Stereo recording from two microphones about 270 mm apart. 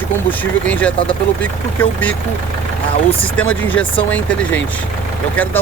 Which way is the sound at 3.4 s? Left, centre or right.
Centre.